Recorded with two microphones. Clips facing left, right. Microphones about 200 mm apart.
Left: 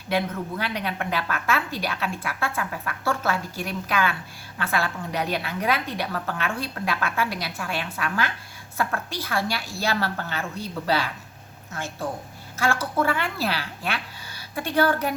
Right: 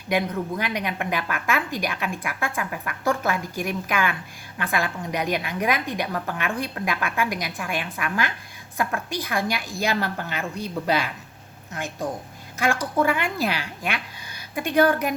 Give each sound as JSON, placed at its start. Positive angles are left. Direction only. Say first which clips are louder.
{"t": 0.1, "sound": "a woman's voice", "louder": "right 2 dB", "side_deg": -15}